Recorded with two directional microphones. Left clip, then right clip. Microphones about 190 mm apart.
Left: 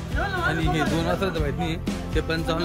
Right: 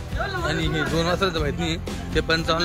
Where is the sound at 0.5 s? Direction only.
10° left (ahead or behind).